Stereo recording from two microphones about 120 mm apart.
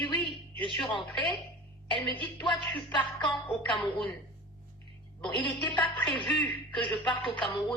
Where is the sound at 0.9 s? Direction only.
40° left (ahead or behind).